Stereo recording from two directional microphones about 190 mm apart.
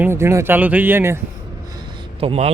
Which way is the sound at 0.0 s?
15° right (ahead or behind).